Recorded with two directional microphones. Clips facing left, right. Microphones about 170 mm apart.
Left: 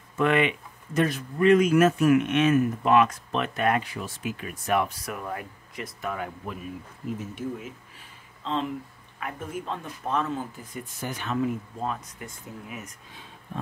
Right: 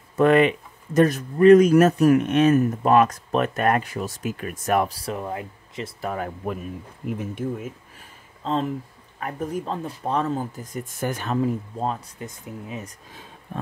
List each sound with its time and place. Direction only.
0.2 s speech: 40° right (ahead or behind)
8.4 s speech: 40° right (ahead or behind)
11.3 s speech: 35° right (ahead or behind)
12.3 s speech: 20° right (ahead or behind)